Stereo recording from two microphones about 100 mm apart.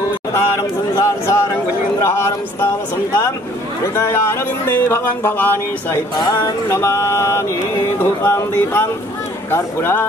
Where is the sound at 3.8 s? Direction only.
30° left (ahead or behind).